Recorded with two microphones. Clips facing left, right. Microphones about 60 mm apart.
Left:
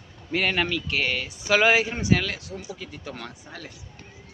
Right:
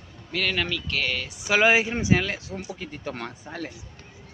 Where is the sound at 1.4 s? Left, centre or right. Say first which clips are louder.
Even; centre.